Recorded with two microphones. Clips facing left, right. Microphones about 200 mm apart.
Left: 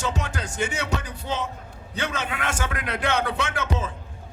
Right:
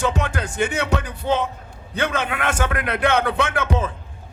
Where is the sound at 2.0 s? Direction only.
55° right (ahead or behind).